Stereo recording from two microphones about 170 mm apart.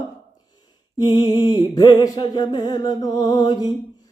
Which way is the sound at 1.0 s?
25° left (ahead or behind).